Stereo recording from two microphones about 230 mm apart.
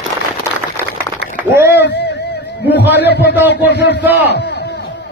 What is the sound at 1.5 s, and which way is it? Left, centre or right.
Speech, centre.